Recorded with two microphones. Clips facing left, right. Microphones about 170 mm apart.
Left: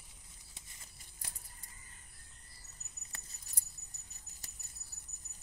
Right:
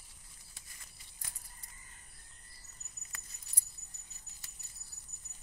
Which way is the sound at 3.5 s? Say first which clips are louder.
Left 1 dB; 45° left (ahead or behind).